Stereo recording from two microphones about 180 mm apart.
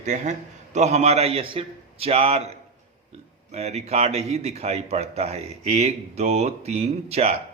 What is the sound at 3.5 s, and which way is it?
A man's voice, 35° right (ahead or behind).